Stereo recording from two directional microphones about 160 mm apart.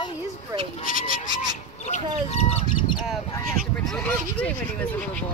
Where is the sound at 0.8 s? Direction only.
60° left (ahead or behind).